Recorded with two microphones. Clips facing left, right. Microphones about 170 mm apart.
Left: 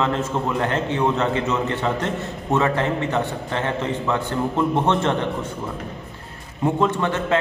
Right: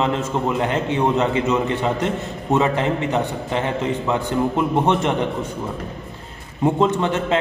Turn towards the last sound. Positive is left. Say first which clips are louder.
# right 1 dB
turn(degrees=-20)  # may be behind; listen again after turning